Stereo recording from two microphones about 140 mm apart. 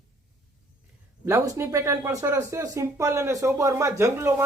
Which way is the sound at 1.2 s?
20° right (ahead or behind).